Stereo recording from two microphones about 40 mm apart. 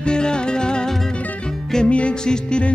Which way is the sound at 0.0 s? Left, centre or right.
Left.